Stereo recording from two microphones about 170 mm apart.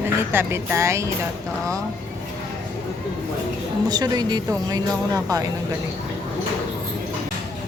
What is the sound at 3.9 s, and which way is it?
Speech, 25° right (ahead or behind).